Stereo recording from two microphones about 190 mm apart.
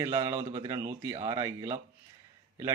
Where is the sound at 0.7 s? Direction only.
15° right (ahead or behind).